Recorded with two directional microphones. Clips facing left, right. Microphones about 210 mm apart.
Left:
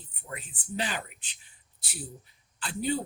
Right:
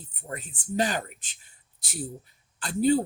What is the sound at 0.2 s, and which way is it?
Speech, 45° right (ahead or behind).